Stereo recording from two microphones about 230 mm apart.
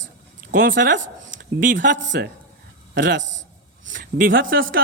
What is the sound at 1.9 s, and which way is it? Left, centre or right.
A man's voice, right.